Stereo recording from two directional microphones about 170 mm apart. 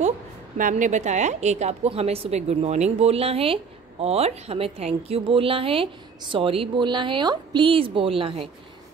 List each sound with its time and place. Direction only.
0.6 s a woman's voice: 50° right (ahead or behind); by 8.5 s 30° right (ahead or behind)